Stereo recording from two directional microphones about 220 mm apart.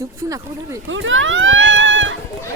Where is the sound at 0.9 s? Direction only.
60° right (ahead or behind).